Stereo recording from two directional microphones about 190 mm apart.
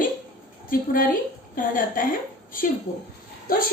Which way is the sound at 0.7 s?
45° left (ahead or behind).